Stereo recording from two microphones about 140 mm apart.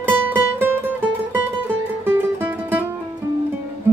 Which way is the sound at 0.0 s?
15° right (ahead or behind).